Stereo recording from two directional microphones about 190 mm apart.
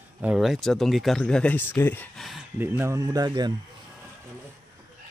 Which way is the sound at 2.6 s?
10° right (ahead or behind).